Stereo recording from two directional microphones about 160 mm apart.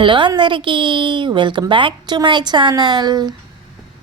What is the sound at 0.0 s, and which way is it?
A woman's voice, 30° right (ahead or behind).